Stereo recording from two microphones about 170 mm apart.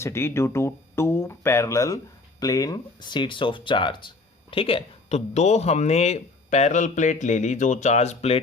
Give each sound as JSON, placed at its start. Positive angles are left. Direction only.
{"t": 0.0, "sound": "speech", "side_deg": 15}